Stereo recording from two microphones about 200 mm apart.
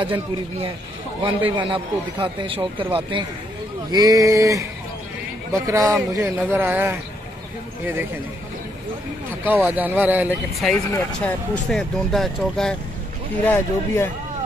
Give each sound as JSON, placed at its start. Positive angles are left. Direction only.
{"t": 0.0, "sound": "a man's voice", "side_deg": -25}
{"t": 9.4, "sound": "speech", "side_deg": -10}
{"t": 10.9, "sound": "speech", "side_deg": 10}